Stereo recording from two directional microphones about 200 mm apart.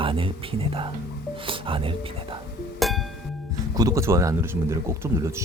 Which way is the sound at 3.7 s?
15° right (ahead or behind).